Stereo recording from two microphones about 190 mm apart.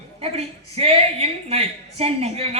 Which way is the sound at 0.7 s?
30° right (ahead or behind).